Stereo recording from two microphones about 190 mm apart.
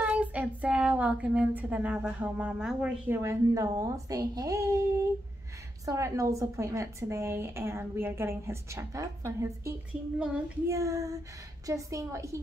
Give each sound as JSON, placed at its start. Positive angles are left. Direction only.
{"t": 0.0, "sound": "child singing", "side_deg": -10}
{"t": 5.9, "sound": "child singing", "side_deg": -15}
{"t": 10.1, "sound": "child singing", "side_deg": -5}
{"t": 10.7, "sound": "child singing", "side_deg": -15}